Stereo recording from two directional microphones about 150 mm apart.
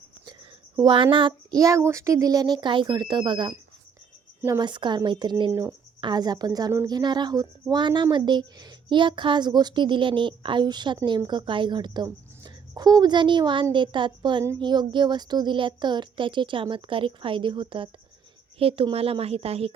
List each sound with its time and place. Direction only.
0.8 s a woman's voice: 30° right (ahead or behind)